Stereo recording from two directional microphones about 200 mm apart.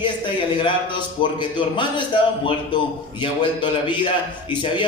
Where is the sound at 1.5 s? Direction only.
25° left (ahead or behind).